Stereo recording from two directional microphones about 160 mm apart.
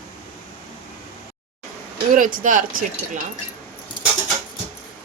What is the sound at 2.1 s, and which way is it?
Speech, 55° right (ahead or behind).